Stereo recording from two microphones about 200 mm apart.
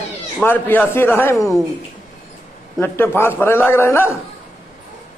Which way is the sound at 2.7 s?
10° left (ahead or behind).